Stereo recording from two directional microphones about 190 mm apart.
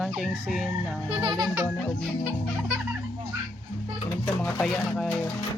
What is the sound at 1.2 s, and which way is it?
Speech, 20° right (ahead or behind).